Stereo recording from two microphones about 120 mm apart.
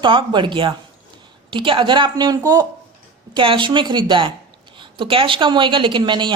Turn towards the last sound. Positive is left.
turn(degrees=-40)  # may be behind; listen again after turning